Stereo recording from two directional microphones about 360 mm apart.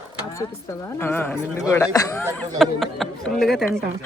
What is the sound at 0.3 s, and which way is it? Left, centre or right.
A woman's voice, centre.